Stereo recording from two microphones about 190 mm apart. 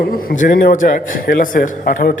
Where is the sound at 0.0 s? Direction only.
50° left (ahead or behind).